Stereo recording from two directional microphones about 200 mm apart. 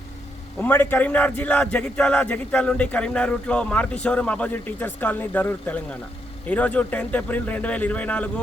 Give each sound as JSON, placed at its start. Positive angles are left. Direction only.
{"t": 0.6, "sound": "a man's voice", "side_deg": 10}